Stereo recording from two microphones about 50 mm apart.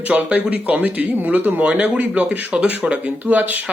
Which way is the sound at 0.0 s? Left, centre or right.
Right.